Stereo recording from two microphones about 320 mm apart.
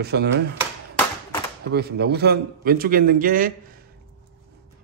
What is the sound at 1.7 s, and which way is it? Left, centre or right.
Speech, right.